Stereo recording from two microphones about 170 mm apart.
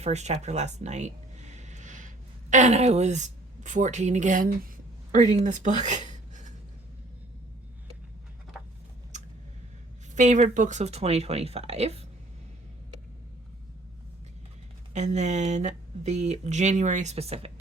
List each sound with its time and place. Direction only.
0.0 s speech: 40° right (ahead or behind)
9.1 s a sound: 45° right (ahead or behind)
10.2 s speech: 45° right (ahead or behind)
14.9 s speech: 45° right (ahead or behind)